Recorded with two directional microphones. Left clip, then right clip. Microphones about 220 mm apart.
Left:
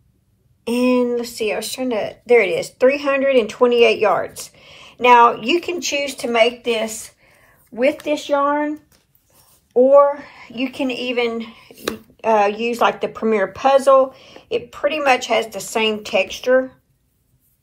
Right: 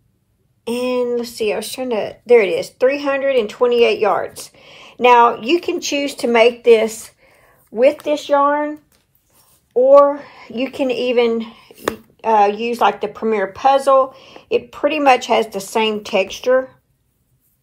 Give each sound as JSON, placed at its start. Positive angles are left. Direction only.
{"t": 0.7, "sound": "speech", "side_deg": -10}
{"t": 9.8, "sound": "speech", "side_deg": -10}